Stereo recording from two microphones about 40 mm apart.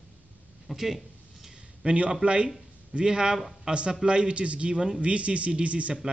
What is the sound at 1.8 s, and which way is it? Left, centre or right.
Speech, right.